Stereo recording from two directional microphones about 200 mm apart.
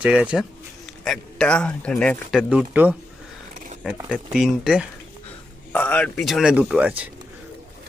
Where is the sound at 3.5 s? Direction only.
40° right (ahead or behind).